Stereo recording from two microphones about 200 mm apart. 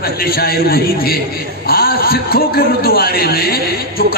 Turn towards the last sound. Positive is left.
turn(degrees=50)  # may be behind; listen again after turning